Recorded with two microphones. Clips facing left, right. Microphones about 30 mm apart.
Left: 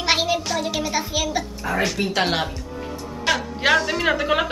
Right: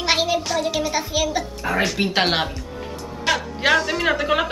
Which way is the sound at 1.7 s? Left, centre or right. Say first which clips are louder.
Right 2 dB; right.